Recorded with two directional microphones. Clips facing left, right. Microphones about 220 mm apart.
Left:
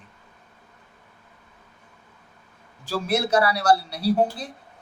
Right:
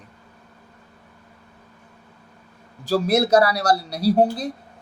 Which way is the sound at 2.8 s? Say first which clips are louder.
Right 6 dB; 40° right (ahead or behind).